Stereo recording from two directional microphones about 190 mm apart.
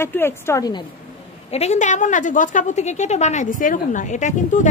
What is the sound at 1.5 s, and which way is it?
A woman's voice, 35° left (ahead or behind).